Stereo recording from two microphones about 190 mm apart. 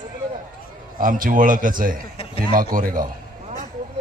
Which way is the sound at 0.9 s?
45° right (ahead or behind).